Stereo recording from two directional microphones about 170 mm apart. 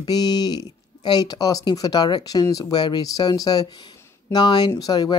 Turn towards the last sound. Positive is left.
turn(degrees=25)  # may be behind; listen again after turning